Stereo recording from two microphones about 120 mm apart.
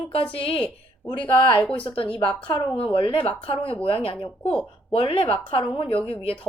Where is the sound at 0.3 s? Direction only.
50° left (ahead or behind).